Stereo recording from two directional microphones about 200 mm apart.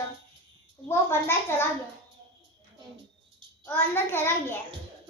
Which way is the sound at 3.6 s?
10° left (ahead or behind).